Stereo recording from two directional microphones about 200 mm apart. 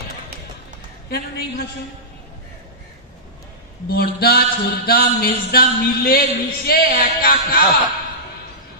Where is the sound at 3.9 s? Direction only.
50° left (ahead or behind).